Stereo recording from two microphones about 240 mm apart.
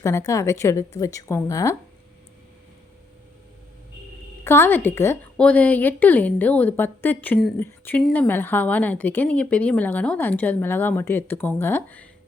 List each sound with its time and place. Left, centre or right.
0.0 s a woman's voice: centre
4.4 s a woman's voice: centre